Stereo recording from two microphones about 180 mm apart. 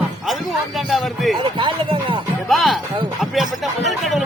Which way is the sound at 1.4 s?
30° right (ahead or behind).